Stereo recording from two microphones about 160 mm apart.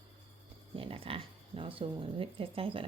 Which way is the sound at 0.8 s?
35° right (ahead or behind).